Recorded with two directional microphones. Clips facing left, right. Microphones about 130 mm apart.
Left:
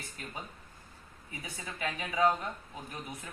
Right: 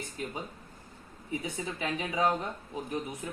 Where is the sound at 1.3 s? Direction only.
20° right (ahead or behind).